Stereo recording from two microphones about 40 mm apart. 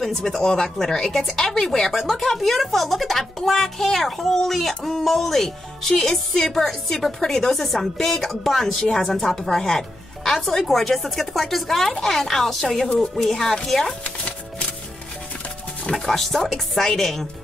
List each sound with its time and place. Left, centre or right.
0.0 s speech: centre
1.9 s speech: centre
14.0 s chopping: left
15.9 s speech: centre